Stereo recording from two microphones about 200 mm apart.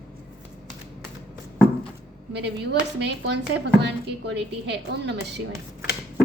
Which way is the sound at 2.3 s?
60° right (ahead or behind).